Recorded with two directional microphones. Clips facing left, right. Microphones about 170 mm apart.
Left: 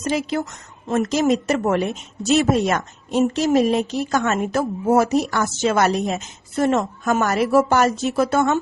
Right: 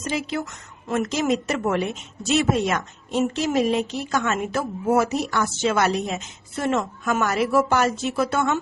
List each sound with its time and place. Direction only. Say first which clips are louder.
0.0 s a woman's voice: left 4 dB; 40° left (ahead or behind)